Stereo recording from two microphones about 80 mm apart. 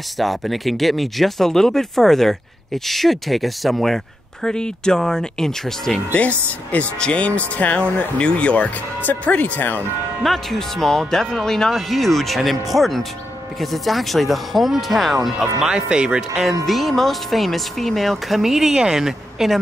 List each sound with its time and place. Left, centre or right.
0.2 s speech: centre
6.1 s speech: centre
10.2 s speech: centre
16.6 s speech: centre